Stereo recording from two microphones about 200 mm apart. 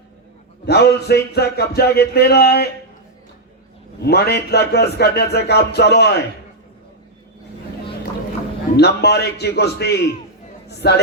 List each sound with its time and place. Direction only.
0.6 s speech: 55° left (ahead or behind)
4.0 s speech: 55° left (ahead or behind)
8.7 s speech: 55° left (ahead or behind)